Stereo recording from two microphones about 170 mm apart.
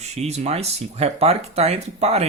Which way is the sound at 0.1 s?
40° right (ahead or behind).